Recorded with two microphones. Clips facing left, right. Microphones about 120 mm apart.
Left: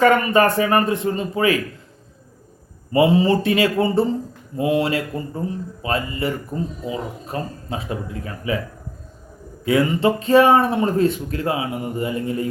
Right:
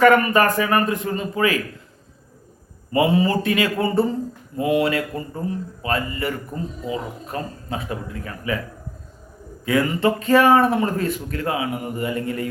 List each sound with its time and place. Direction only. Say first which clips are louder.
0.0 s speech: even; 25° left (ahead or behind)
2.9 s speech: left 3 dB; 25° left (ahead or behind)
9.6 s speech: left 2 dB; 25° left (ahead or behind)